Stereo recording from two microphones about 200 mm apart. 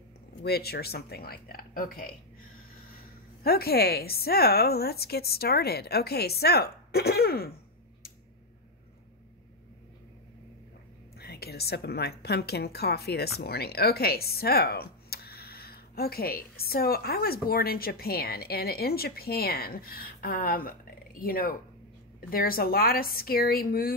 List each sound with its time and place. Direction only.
0.4 s speech: 55° left (ahead or behind)
3.4 s speech: 50° left (ahead or behind)
11.1 s speech: 50° left (ahead or behind)